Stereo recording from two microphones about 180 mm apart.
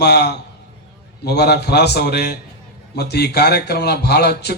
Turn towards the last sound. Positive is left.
turn(degrees=65)  # may be behind; listen again after turning